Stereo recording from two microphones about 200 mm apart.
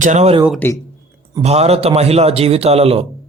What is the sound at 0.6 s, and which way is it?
Speech, 10° left (ahead or behind).